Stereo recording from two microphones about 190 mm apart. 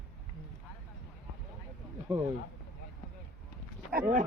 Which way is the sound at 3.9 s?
50° right (ahead or behind).